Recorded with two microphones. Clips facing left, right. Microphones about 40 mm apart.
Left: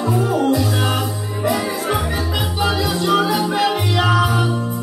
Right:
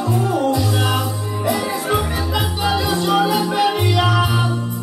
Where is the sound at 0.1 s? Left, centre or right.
Centre.